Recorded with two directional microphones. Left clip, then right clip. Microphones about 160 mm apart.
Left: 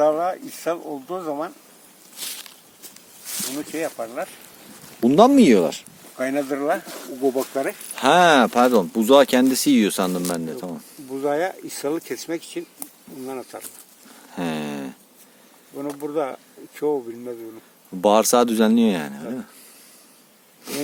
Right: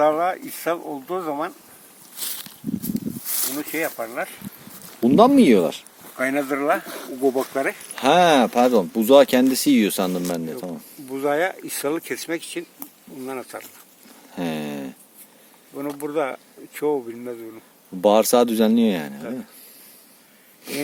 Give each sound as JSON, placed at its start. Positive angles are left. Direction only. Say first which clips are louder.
{"t": 0.0, "sound": "speech", "louder": "even", "side_deg": 20}
{"t": 2.1, "sound": "a sound", "louder": "even", "side_deg": -45}
{"t": 3.6, "sound": "speech", "louder": "right 2 dB", "side_deg": 20}
{"t": 4.9, "sound": "speech", "louder": "even", "side_deg": 0}
{"t": 6.1, "sound": "speech", "louder": "right 1 dB", "side_deg": 20}
{"t": 6.4, "sound": "speech", "louder": "right 1 dB", "side_deg": 10}
{"t": 6.8, "sound": "speech", "louder": "right 1 dB", "side_deg": 0}
{"t": 14.3, "sound": "a sound", "louder": "even", "side_deg": 0}
{"t": 16.0, "sound": "speech", "louder": "right 1 dB", "side_deg": 5}
{"t": 20.7, "sound": "speech", "louder": "right 1 dB", "side_deg": 10}